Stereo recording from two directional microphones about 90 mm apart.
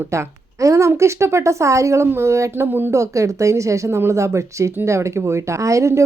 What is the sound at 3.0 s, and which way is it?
A woman's voice, 35° right (ahead or behind).